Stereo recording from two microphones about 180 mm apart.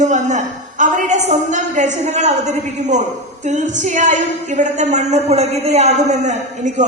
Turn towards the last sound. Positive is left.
turn(degrees=-40)  # may be behind; listen again after turning